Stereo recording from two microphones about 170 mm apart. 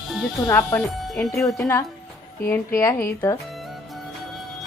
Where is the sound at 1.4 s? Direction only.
15° left (ahead or behind).